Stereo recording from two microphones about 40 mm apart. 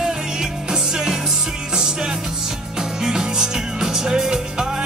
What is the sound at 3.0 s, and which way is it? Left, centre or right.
Music, centre.